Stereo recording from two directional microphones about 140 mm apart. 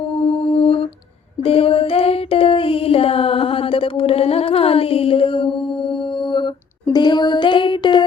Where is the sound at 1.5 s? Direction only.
40° left (ahead or behind).